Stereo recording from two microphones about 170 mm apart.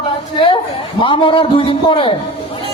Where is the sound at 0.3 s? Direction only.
30° left (ahead or behind).